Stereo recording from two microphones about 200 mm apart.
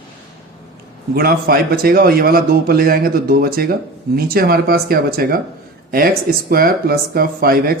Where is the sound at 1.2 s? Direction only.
50° right (ahead or behind).